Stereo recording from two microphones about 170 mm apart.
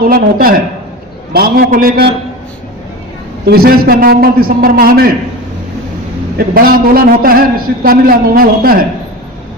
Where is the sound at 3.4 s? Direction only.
65° right (ahead or behind).